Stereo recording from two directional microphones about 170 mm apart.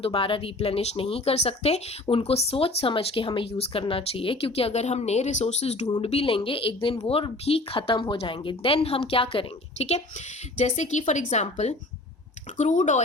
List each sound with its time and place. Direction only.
0.0 s speech: 30° left (ahead or behind)